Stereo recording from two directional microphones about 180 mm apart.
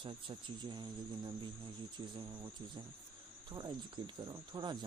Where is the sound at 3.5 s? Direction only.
25° right (ahead or behind).